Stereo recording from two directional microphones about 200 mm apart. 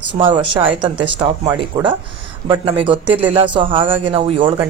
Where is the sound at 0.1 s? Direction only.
25° right (ahead or behind).